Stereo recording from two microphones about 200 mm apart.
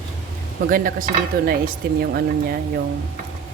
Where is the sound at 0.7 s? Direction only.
45° right (ahead or behind).